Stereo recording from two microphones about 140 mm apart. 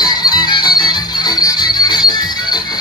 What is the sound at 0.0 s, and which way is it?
Music, 30° left (ahead or behind).